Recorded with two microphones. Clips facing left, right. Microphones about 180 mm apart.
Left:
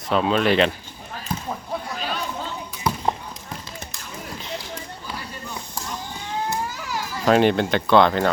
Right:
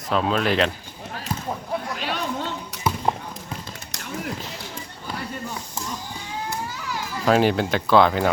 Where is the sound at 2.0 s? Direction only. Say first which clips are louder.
Right 2 dB; 75° right (ahead or behind).